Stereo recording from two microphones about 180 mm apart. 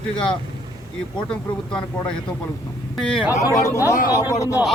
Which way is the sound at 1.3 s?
5° left (ahead or behind).